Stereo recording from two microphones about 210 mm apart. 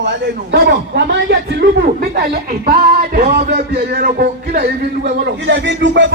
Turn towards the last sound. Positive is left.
turn(degrees=-60)  # may be behind; listen again after turning